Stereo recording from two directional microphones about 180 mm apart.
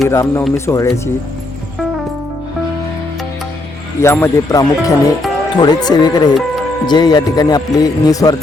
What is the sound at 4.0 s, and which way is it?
A man's voice, 15° left (ahead or behind).